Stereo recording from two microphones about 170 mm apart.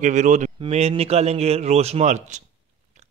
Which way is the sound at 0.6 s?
35° right (ahead or behind).